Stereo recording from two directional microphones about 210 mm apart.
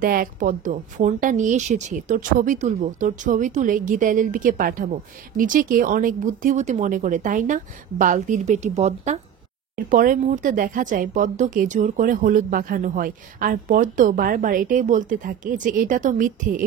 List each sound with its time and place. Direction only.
0.0 s speech: 40° right (ahead or behind)